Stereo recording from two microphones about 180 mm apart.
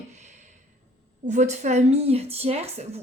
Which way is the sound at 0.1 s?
40° right (ahead or behind).